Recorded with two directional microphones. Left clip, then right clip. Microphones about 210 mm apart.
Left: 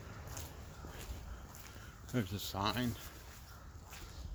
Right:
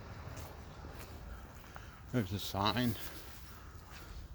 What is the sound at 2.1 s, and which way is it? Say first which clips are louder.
Speech: right 2 dB; 20° right (ahead or behind).